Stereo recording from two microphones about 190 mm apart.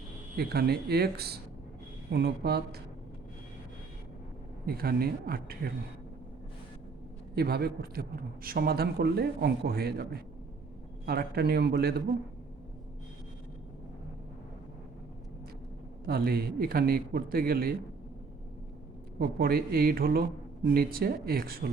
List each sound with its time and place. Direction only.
0.3 s a man's voice: 55° right (ahead or behind)
4.6 s a man's voice: 55° right (ahead or behind)
7.3 s a man's voice: 55° right (ahead or behind)
16.0 s a man's voice: 50° right (ahead or behind)
19.2 s a man's voice: 50° right (ahead or behind)